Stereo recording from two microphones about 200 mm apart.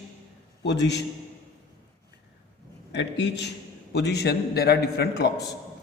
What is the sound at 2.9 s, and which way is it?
A man's voice, 60° left (ahead or behind).